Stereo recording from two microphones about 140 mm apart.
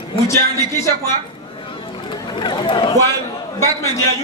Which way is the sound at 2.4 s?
35° left (ahead or behind).